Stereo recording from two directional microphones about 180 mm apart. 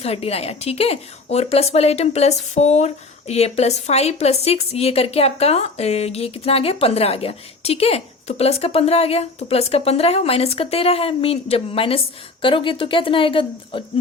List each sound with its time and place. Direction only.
0.0 s a woman's voice: 35° left (ahead or behind)